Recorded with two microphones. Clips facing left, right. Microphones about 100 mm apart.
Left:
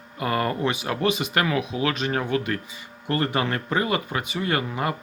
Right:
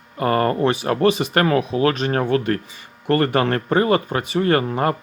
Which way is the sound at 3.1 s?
60° right (ahead or behind).